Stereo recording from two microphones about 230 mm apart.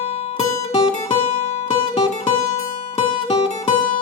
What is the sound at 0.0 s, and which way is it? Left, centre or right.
Guitar, left.